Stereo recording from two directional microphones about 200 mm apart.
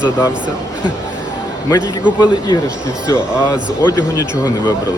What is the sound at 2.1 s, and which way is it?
Speech, 20° left (ahead or behind).